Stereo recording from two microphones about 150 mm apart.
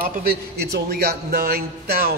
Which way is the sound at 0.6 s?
90° right.